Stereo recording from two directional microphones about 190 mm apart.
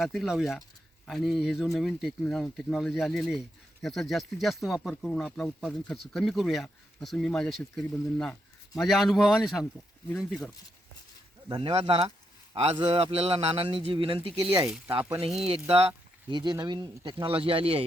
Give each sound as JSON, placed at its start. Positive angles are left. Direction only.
{"t": 0.0, "sound": "speech", "side_deg": 0}
{"t": 11.4, "sound": "speech", "side_deg": -25}
{"t": 16.3, "sound": "speech", "side_deg": -25}